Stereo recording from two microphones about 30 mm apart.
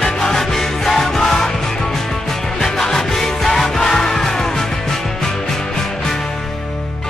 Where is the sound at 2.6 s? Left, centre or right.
Centre.